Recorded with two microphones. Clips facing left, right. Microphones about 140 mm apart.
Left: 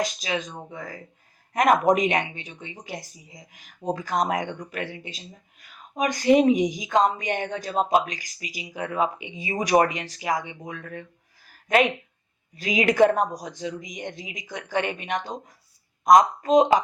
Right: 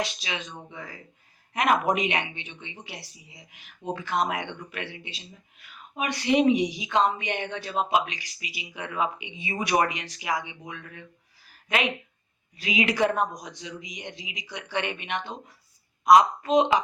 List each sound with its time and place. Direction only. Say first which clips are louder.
0.0 s speech: left 5 dB; 40° left (ahead or behind)
11.4 s a sound: left 7 dB; 40° left (ahead or behind)
12.5 s speech: left 6 dB; 40° left (ahead or behind)